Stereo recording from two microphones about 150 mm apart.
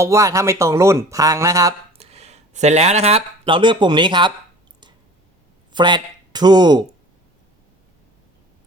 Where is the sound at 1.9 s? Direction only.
45° right (ahead or behind).